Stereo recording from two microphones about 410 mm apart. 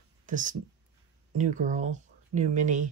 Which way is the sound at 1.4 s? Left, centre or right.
Centre.